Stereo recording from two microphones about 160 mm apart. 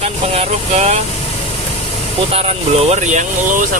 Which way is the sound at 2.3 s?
40° right (ahead or behind).